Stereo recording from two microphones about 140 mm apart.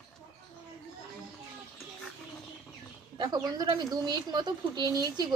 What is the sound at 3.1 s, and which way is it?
Speech, 30° right (ahead or behind).